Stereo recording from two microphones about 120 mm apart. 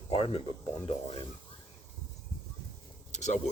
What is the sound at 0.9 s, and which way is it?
Speech, 60° left (ahead or behind).